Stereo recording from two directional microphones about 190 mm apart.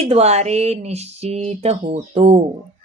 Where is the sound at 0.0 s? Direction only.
35° right (ahead or behind).